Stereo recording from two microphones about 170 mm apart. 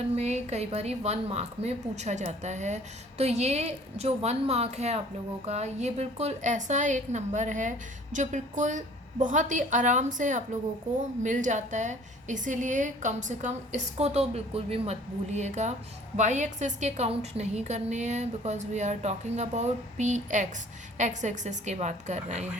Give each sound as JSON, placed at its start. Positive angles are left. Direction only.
{"t": 0.2, "sound": "a woman's voice", "side_deg": -40}